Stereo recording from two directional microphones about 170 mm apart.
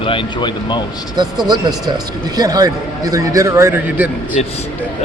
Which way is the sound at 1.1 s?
25° right (ahead or behind).